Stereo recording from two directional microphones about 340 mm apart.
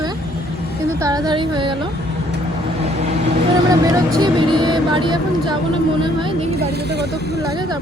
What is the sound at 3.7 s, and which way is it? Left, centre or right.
Speech, centre.